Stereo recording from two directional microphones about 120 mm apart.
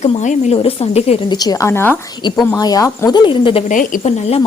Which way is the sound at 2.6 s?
30° left (ahead or behind).